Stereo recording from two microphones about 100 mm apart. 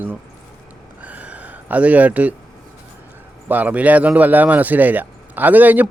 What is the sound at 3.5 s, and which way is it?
Speech, 15° right (ahead or behind).